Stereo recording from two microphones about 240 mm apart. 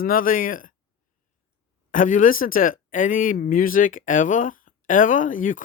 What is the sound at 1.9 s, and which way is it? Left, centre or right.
Speech, left.